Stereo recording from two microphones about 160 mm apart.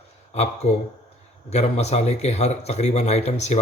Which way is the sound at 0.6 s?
40° left (ahead or behind).